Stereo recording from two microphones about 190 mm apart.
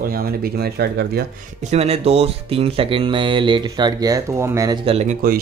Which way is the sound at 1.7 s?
35° right (ahead or behind).